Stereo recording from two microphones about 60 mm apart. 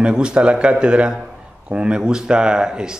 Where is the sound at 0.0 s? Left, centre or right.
Centre.